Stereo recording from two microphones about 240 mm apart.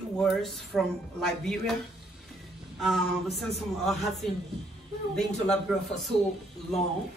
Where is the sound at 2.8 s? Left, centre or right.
Centre.